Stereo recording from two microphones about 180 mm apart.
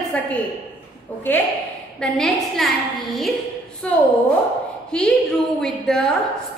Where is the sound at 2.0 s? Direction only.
5° left (ahead or behind).